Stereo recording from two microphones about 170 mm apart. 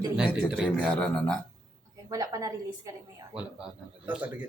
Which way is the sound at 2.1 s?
20° right (ahead or behind).